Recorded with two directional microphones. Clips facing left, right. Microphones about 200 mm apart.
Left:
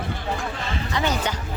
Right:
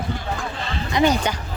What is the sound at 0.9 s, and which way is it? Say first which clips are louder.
Speech: right 7 dB; 15° right (ahead or behind).